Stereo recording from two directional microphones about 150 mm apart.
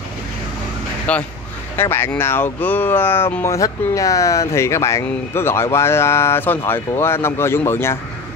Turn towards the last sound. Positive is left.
turn(degrees=15)  # may be behind; listen again after turning